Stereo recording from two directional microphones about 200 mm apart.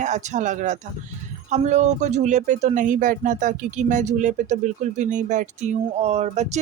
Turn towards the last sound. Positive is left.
turn(degrees=-35)  # may be behind; listen again after turning